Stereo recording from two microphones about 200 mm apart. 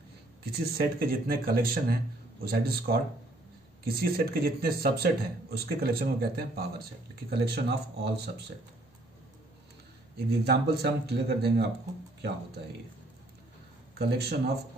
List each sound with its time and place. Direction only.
0.4 s speech: 50° right (ahead or behind)
10.1 s speech: 50° right (ahead or behind)
13.9 s speech: 55° right (ahead or behind)